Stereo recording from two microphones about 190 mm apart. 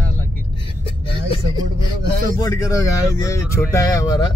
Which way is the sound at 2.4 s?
15° left (ahead or behind).